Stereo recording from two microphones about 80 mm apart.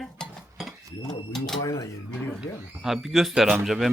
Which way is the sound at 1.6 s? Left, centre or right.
Left.